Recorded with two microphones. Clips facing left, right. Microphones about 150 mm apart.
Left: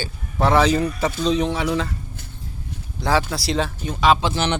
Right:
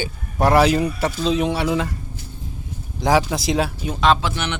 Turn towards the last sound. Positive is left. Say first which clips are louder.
# left 3 dB
turn(degrees=30)  # may be behind; listen again after turning